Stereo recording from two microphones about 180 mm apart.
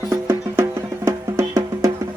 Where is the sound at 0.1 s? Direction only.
15° right (ahead or behind).